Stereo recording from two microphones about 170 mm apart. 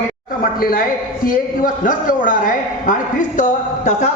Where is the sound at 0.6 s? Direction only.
55° left (ahead or behind).